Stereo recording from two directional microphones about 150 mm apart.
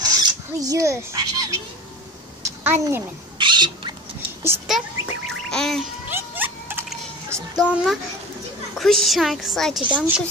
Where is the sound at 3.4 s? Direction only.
30° right (ahead or behind).